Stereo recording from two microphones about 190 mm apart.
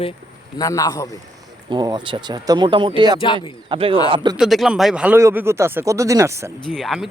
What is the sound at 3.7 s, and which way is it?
Speech, 30° right (ahead or behind).